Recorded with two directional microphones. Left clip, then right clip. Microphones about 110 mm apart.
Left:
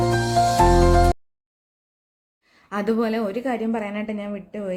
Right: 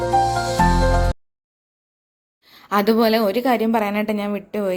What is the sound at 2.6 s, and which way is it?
A woman's voice, 20° right (ahead or behind).